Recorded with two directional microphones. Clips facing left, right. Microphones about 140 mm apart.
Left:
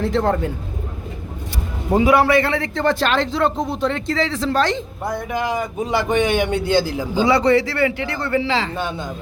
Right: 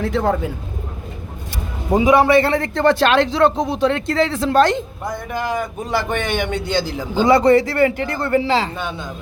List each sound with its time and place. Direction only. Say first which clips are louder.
0.0 s speech: even; centre (ahead or behind)
1.9 s a man's voice: right 2 dB; 15° right (ahead or behind)
2.4 s speech: right 3 dB; 40° right (ahead or behind)
2.7 s speech: right 5 dB; 65° right (ahead or behind)
5.0 s a man's voice: left 2 dB; 10° left (ahead or behind)
7.3 s a man's voice: right 4 dB; 45° right (ahead or behind)